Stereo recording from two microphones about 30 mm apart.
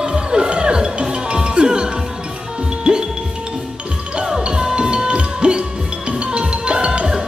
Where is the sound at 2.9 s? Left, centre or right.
Right.